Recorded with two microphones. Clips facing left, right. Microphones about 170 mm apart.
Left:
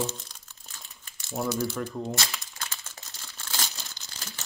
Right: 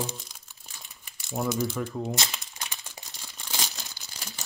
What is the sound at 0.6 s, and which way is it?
Crumpling, 15° right (ahead or behind).